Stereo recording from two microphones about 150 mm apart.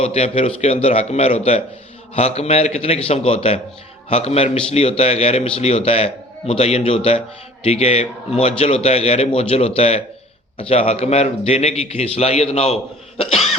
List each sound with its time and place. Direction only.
0.0 s a man's voice: 45° left (ahead or behind)